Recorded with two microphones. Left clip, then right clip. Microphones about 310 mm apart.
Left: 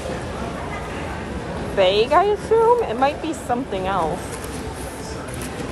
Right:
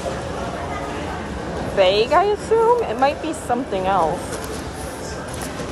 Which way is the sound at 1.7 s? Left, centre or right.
Centre.